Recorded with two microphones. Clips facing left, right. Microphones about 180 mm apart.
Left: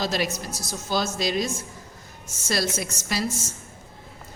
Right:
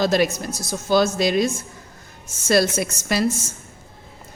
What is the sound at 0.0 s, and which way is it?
A woman's voice, 55° right (ahead or behind).